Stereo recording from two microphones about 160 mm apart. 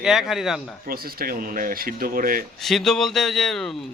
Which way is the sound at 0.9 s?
70° right (ahead or behind).